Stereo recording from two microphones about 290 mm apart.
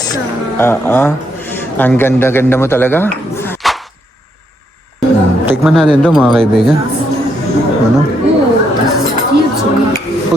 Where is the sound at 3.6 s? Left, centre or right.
Centre.